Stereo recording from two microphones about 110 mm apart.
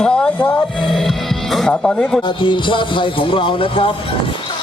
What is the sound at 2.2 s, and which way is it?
Speech, 45° left (ahead or behind).